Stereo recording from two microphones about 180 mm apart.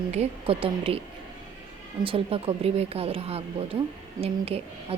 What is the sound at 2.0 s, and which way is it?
A woman's voice, 30° right (ahead or behind).